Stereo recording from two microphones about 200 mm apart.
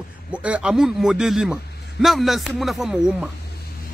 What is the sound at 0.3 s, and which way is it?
Speech, 5° right (ahead or behind).